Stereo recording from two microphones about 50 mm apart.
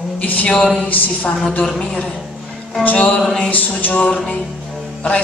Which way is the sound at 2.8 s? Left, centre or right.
Left.